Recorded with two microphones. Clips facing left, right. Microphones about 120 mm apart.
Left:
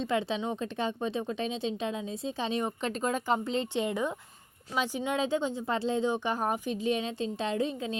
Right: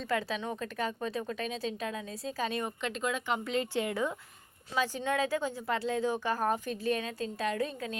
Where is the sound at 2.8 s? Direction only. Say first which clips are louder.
Left 3 dB; 40° left (ahead or behind).